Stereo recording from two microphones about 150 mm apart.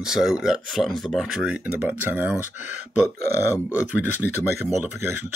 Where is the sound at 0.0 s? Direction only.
5° right (ahead or behind).